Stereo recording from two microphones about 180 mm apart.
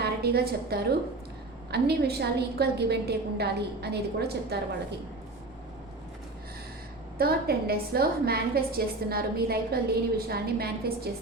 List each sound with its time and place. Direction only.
0.0 s a woman's voice: 60° right (ahead or behind)
7.2 s a woman's voice: 60° right (ahead or behind)